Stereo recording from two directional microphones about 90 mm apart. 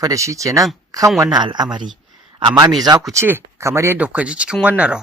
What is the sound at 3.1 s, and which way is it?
Speech, 25° right (ahead or behind).